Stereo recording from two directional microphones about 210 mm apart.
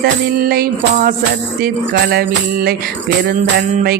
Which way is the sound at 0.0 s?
45° right (ahead or behind).